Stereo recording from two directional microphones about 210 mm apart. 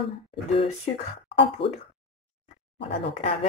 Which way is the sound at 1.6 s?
25° left (ahead or behind).